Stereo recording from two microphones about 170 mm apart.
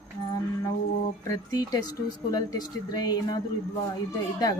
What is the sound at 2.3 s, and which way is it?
Speech, 20° left (ahead or behind).